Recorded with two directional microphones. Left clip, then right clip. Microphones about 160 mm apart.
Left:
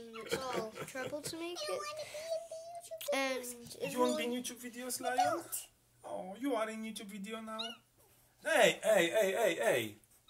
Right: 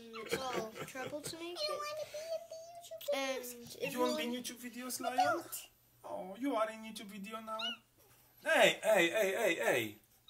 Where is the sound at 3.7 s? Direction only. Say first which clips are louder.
Right 1 dB; 30° left (ahead or behind).